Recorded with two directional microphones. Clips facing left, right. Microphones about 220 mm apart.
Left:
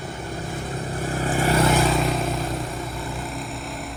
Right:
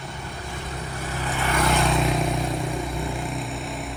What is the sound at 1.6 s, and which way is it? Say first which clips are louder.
Vehicle: left 2 dB; centre (ahead or behind).